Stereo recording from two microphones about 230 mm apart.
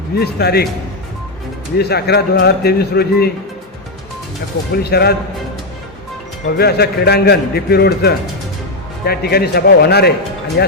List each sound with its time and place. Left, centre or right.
0.2 s speech: left
1.8 s speech: left
4.8 s speech: left
6.6 s speech: left